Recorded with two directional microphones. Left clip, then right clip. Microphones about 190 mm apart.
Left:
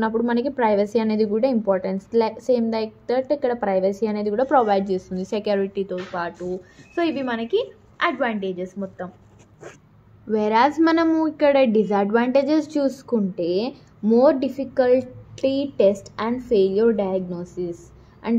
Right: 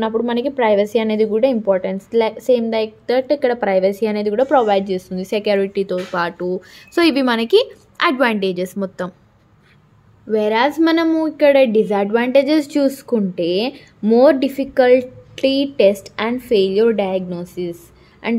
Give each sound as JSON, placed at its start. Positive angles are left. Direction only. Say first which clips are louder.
{"t": 0.0, "sound": "a woman's voice", "louder": "right 3 dB", "side_deg": -15}
{"t": 7.0, "sound": "a woman's voice", "louder": "right 8 dB", "side_deg": -60}
{"t": 10.3, "sound": "a woman's voice", "louder": "right 2 dB", "side_deg": -20}